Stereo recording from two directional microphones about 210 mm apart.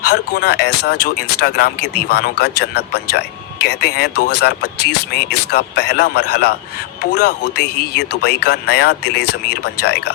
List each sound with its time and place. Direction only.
0.0 s speech: 50° left (ahead or behind)